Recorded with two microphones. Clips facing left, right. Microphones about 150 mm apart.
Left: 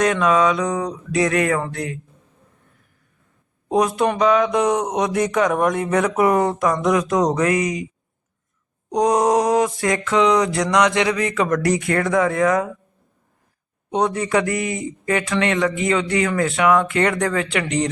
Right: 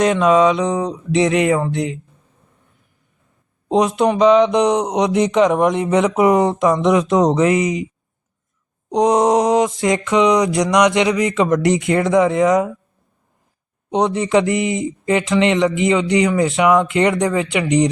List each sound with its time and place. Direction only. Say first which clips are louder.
0.0 s speech: right 4 dB; 25° right (ahead or behind)
3.7 s speech: right 3 dB; 20° right (ahead or behind)
8.9 s speech: right 3 dB; 20° right (ahead or behind)
13.9 s speech: right 3 dB; 20° right (ahead or behind)